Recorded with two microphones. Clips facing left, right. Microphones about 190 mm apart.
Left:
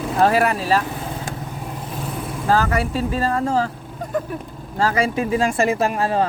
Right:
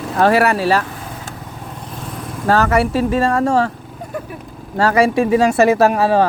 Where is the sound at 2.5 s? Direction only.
75° right (ahead or behind).